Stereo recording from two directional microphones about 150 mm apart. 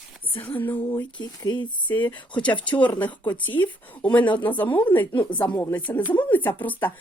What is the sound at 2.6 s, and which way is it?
Speech, 30° left (ahead or behind).